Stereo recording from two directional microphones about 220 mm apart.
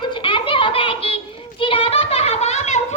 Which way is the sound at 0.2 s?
25° left (ahead or behind).